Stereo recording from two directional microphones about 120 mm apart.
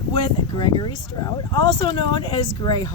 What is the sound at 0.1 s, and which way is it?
Speech, 40° left (ahead or behind).